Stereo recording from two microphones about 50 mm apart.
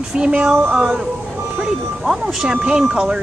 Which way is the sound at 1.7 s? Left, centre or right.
Centre.